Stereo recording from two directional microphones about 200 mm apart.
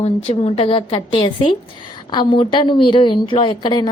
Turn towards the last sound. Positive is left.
turn(degrees=25)  # may be behind; listen again after turning